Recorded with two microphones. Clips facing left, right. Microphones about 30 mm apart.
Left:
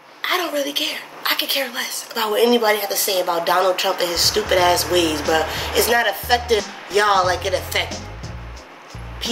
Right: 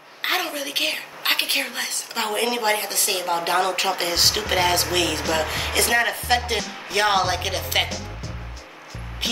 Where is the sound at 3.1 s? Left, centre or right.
Centre.